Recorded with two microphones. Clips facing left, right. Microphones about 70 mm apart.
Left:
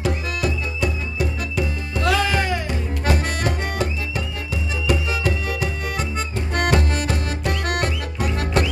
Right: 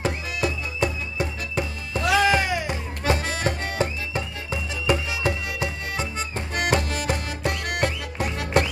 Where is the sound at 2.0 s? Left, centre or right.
Centre.